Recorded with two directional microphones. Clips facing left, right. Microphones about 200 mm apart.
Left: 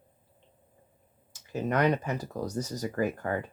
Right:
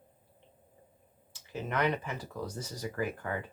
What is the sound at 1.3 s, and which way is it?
Speech, 40° left (ahead or behind).